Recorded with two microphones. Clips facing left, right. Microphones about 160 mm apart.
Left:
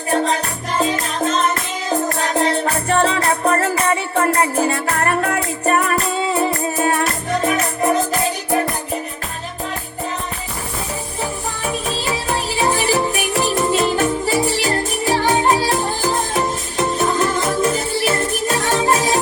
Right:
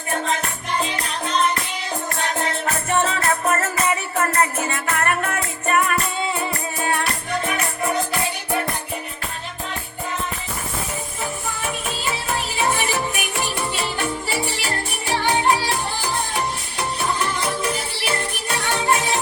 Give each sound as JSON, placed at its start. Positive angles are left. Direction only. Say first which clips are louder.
{"t": 0.1, "sound": "music", "louder": "left 6 dB", "side_deg": 40}
{"t": 11.2, "sound": "music", "louder": "left 4 dB", "side_deg": 35}